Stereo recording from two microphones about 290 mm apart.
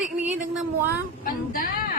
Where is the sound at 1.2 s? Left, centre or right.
Left.